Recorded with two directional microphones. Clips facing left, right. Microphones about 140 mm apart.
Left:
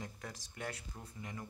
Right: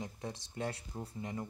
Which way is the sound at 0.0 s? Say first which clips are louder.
Right 5 dB; 25° right (ahead or behind).